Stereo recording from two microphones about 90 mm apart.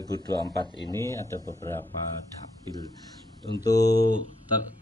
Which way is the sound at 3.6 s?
45° left (ahead or behind).